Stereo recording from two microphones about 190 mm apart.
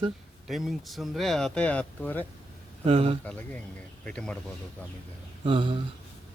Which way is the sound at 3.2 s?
5° left (ahead or behind).